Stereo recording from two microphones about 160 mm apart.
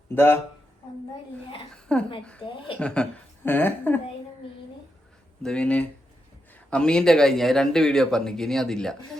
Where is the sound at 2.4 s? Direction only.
35° left (ahead or behind).